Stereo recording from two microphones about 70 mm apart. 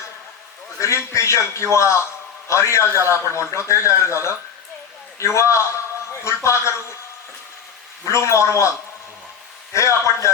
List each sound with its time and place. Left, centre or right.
0.8 s a man's voice: left
8.0 s a man's voice: left
9.7 s a man's voice: left